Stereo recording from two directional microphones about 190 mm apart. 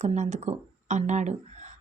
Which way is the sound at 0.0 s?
35° right (ahead or behind).